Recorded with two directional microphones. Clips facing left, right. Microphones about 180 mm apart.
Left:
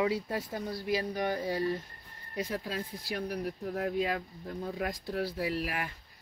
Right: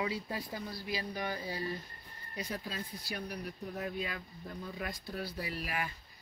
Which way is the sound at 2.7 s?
90° left.